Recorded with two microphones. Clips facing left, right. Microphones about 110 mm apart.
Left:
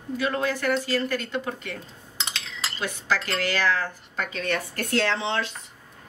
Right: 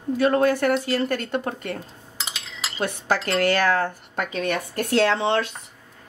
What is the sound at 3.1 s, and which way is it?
A woman's voice, 50° right (ahead or behind).